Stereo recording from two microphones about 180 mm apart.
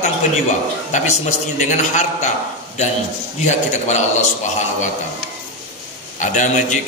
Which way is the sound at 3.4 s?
40° left (ahead or behind).